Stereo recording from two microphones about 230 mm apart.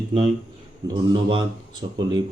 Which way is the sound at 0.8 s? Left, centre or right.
Centre.